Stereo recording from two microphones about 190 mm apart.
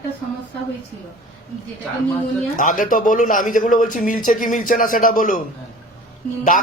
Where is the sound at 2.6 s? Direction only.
45° left (ahead or behind).